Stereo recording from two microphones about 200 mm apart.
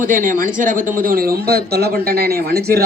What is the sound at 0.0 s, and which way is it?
Speech, 40° right (ahead or behind).